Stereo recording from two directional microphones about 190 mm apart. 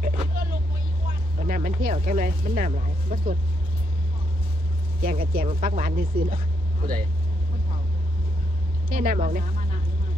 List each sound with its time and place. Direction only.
0.0 s vehicle: 45° right (ahead or behind)
1.4 s speech: 45° right (ahead or behind)
5.0 s speech: 50° right (ahead or behind)
8.8 s speech: 50° right (ahead or behind)